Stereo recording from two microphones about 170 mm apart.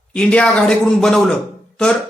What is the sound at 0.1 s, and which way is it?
Speech, 5° left (ahead or behind).